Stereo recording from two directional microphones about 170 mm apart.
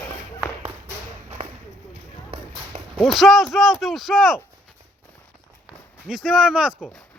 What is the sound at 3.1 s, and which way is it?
Speech, centre (ahead or behind).